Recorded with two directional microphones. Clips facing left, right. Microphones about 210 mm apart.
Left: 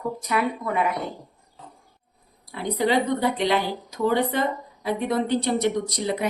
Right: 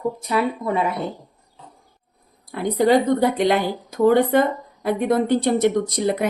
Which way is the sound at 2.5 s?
50° right (ahead or behind).